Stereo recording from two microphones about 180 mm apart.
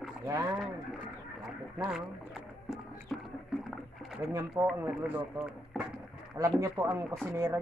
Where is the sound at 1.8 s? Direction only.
5° right (ahead or behind).